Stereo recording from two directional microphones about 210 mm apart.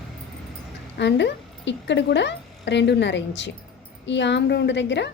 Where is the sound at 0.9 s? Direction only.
55° left (ahead or behind).